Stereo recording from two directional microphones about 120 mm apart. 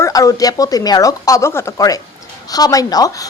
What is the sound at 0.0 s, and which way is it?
A woman's voice, 30° left (ahead or behind).